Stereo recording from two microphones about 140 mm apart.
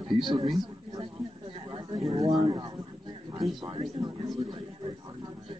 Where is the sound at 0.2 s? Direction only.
35° right (ahead or behind).